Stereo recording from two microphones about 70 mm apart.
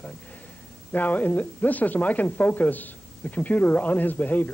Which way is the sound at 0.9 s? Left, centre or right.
Left.